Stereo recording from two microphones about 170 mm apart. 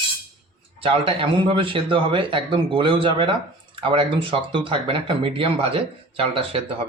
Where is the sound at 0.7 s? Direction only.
30° right (ahead or behind).